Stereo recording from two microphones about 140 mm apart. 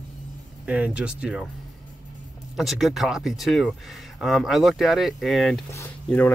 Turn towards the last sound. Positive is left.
turn(degrees=10)  # may be behind; listen again after turning